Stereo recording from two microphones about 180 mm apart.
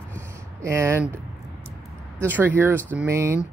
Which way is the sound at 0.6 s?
15° right (ahead or behind).